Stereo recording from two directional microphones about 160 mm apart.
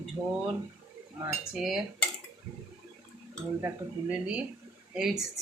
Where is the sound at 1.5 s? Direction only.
Centre (ahead or behind).